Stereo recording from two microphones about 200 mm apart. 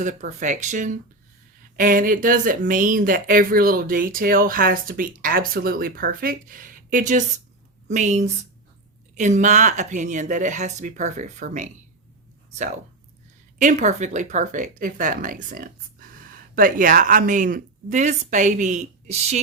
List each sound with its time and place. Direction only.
0.0 s speech: 40° right (ahead or behind)